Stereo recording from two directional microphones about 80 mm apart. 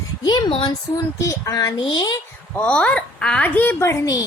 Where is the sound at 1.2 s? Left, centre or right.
Left.